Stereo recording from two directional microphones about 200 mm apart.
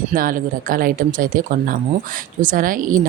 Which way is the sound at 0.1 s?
45° right (ahead or behind).